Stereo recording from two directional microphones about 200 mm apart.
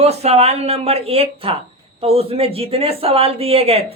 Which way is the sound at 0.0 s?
30° right (ahead or behind).